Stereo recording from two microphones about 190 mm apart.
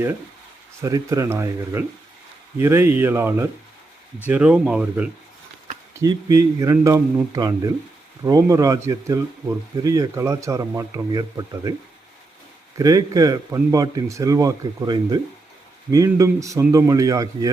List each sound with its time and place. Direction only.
0.8 s a man's voice: 15° right (ahead or behind)
5.9 s a man's voice: 20° right (ahead or behind)
12.7 s a man's voice: 20° right (ahead or behind)